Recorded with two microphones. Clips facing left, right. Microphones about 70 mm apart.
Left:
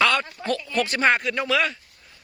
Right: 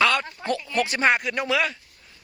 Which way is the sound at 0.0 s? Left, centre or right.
Centre.